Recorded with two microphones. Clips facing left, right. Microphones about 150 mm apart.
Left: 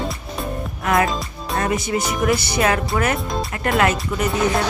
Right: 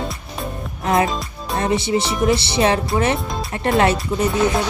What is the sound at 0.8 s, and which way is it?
Music, 25° right (ahead or behind).